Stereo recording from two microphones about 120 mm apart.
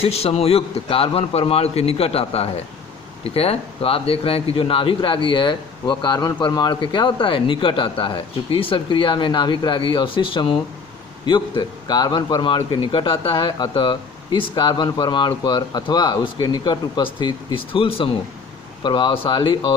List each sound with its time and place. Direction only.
0.0 s a man's voice: 60° left (ahead or behind); by 19.7 s 40° left (ahead or behind)